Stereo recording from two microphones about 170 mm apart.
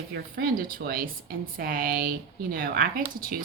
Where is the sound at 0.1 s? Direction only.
60° right (ahead or behind).